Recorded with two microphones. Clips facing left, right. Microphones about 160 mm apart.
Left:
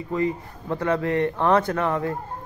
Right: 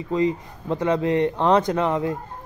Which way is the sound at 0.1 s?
20° right (ahead or behind).